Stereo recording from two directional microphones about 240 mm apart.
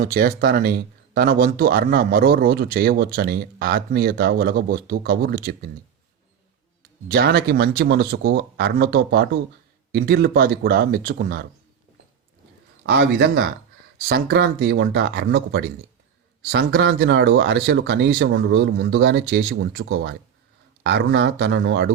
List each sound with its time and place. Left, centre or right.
0.0 s speech: right
7.1 s speech: right
12.8 s speech: right